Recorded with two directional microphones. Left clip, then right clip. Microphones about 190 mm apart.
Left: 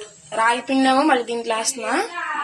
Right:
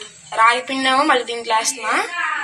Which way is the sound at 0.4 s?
40° left (ahead or behind).